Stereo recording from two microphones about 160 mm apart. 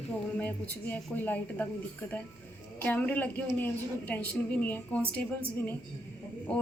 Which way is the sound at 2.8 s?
10° left (ahead or behind).